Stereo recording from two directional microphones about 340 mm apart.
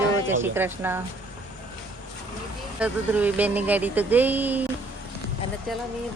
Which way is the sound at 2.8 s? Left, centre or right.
Centre.